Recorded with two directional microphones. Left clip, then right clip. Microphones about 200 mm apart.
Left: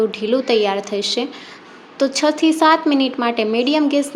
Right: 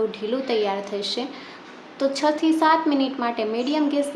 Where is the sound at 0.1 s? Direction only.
35° left (ahead or behind).